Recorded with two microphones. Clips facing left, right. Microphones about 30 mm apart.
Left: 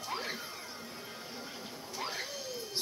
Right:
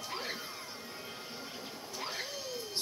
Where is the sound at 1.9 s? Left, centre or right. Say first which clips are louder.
Left 1 dB; centre.